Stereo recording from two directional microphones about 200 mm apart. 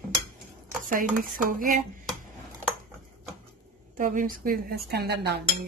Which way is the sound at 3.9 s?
40° right (ahead or behind).